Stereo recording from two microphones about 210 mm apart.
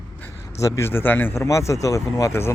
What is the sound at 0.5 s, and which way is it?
Speech, 15° left (ahead or behind).